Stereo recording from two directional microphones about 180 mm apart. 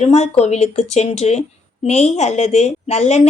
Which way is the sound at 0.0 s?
35° left (ahead or behind).